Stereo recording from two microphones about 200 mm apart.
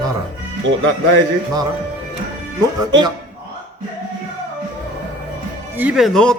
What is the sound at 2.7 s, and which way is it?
Speech, 20° right (ahead or behind).